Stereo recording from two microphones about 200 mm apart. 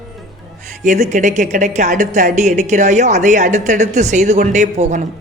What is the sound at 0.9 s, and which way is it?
A woman's voice, 35° right (ahead or behind).